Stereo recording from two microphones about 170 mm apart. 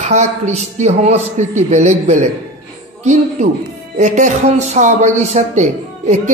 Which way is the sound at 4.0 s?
45° right (ahead or behind).